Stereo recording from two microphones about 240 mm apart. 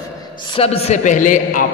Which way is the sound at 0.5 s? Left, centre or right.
Left.